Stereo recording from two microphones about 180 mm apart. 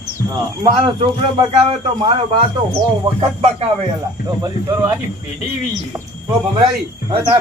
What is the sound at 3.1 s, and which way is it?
Music, 35° right (ahead or behind).